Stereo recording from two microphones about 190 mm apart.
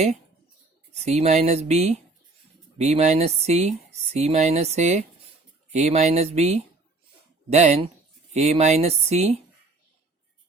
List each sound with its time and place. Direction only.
0.9 s speech: 35° right (ahead or behind)